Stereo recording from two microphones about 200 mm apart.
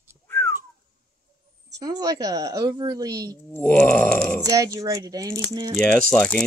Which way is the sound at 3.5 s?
5° left (ahead or behind).